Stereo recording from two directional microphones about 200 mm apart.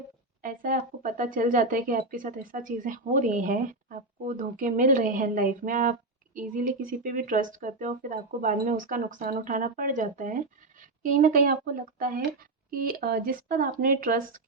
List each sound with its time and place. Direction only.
0.4 s speech: 45° right (ahead or behind)